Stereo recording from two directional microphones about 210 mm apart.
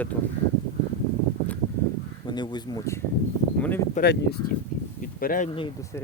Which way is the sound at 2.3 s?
20° left (ahead or behind).